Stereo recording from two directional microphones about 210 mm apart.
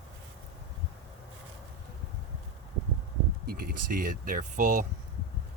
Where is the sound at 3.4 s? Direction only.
45° right (ahead or behind).